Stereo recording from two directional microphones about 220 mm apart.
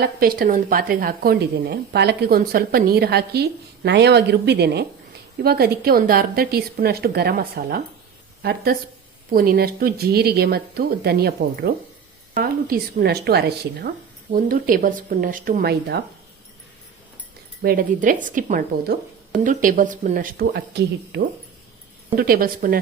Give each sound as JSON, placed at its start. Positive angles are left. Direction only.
{"t": 0.0, "sound": "a woman's voice", "side_deg": -40}
{"t": 17.6, "sound": "speech", "side_deg": -40}